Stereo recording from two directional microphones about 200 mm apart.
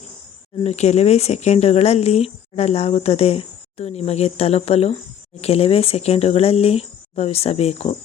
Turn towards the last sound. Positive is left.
turn(degrees=30)  # may be behind; listen again after turning